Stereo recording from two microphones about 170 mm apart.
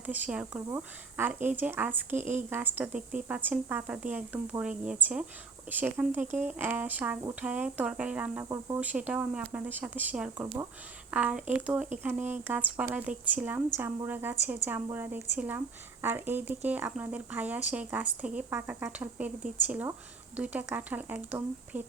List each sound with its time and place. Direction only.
0.0 s speech: 10° right (ahead or behind)
2.1 s speech: 45° right (ahead or behind)
2.5 s speech: 10° right (ahead or behind)
8.4 s speech: 20° right (ahead or behind)
8.8 s speech: 10° right (ahead or behind)